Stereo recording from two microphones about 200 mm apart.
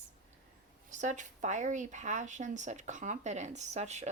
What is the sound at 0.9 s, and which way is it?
Speech, 40° right (ahead or behind).